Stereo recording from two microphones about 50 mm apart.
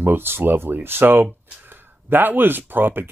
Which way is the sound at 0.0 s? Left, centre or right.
Right.